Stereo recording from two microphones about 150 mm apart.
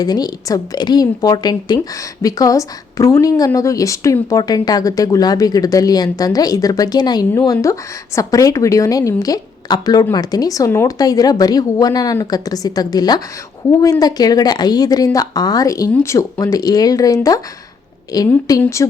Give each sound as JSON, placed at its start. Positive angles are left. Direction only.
{"t": 0.0, "sound": "a woman's voice", "side_deg": 25}